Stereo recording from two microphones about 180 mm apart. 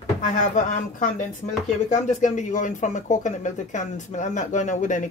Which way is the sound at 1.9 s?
40° left (ahead or behind).